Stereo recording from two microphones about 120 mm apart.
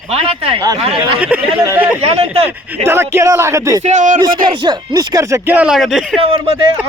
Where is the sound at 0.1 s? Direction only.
55° right (ahead or behind).